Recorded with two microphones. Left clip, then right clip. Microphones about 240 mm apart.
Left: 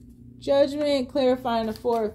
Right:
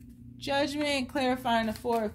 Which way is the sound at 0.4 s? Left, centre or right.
Right.